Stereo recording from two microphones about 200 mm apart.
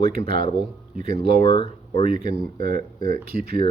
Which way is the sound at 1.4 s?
25° left (ahead or behind).